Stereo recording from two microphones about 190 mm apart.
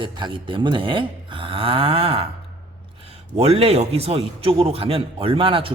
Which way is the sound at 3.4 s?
30° right (ahead or behind).